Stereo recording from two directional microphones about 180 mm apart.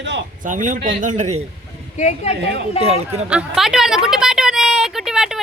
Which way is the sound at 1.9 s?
40° left (ahead or behind).